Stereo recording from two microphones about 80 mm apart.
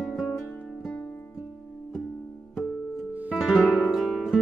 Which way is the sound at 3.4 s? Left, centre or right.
Centre.